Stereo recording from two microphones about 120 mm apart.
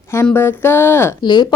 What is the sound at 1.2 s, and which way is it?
Speech, 40° left (ahead or behind).